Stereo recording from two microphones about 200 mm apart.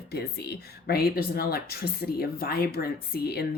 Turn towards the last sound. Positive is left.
turn(degrees=50)  # may be behind; listen again after turning